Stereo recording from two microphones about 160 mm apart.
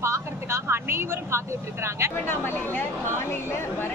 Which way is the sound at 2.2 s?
15° left (ahead or behind).